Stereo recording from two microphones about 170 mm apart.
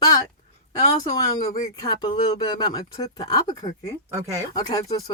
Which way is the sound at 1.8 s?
25° left (ahead or behind).